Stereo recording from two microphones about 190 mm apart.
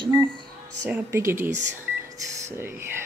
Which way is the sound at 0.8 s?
10° right (ahead or behind).